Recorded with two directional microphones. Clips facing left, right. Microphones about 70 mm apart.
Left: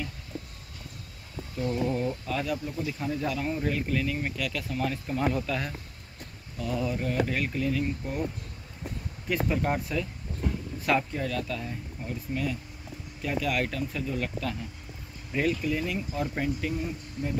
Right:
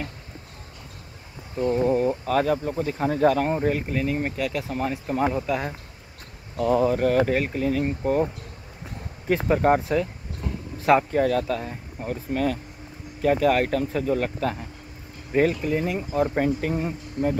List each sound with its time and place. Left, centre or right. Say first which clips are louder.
1.5 s speech: right 7 dB; right
2.2 s speech: right 9 dB; right
6.5 s speech: right 10 dB; right
7.3 s speech: right 5 dB; right
9.3 s speech: right 8 dB; right
11.1 s speech: right 10 dB; right